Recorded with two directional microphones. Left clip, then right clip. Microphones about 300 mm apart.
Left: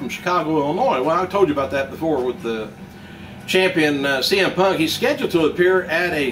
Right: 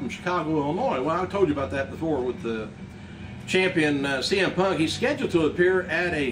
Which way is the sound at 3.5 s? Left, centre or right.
Centre.